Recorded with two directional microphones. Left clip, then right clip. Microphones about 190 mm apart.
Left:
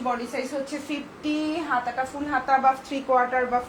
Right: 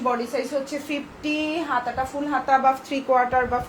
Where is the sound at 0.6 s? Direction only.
40° right (ahead or behind).